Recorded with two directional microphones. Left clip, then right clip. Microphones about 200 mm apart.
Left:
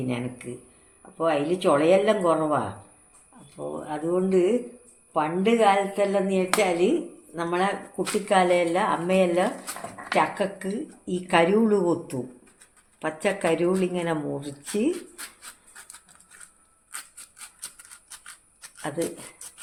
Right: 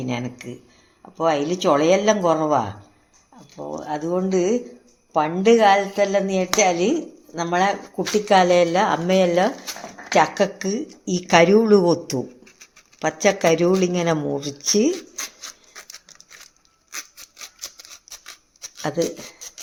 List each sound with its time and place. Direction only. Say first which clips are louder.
0.1 s speech: right 3 dB; 45° right (ahead or behind)
3.8 s speech: right 2 dB; 40° right (ahead or behind)
18.8 s speech: right 7 dB; 45° right (ahead or behind)